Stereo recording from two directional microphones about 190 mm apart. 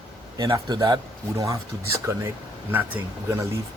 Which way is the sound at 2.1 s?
15° right (ahead or behind).